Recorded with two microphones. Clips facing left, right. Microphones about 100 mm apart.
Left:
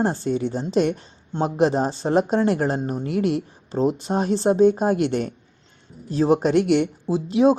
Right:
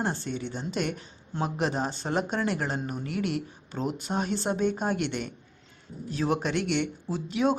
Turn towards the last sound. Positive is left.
turn(degrees=35)  # may be behind; listen again after turning